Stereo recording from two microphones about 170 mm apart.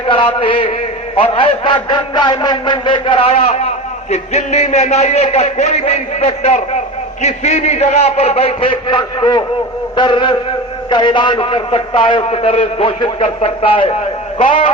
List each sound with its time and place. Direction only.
0.1 s a man's voice: 30° left (ahead or behind)